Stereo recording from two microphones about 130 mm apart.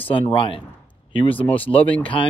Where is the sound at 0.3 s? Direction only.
40° left (ahead or behind).